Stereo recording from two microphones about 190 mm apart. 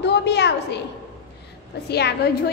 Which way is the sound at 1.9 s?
60° left (ahead or behind).